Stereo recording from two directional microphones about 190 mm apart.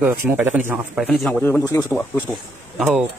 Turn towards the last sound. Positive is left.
turn(degrees=-5)  # may be behind; listen again after turning